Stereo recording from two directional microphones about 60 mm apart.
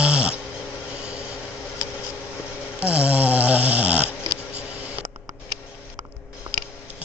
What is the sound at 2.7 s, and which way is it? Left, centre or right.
Snoring, centre.